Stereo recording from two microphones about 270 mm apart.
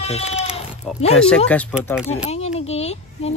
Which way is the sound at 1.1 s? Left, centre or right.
Centre.